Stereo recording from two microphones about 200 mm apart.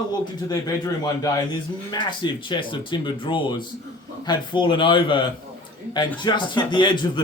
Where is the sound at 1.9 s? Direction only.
20° left (ahead or behind).